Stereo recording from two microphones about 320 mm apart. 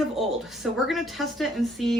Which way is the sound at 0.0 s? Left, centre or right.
Centre.